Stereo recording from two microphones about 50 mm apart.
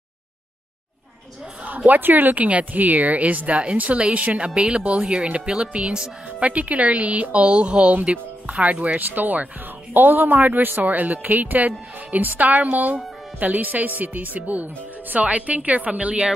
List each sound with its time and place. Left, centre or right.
1.9 s speech: right